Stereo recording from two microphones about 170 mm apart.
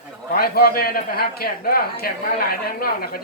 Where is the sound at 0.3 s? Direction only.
60° left (ahead or behind).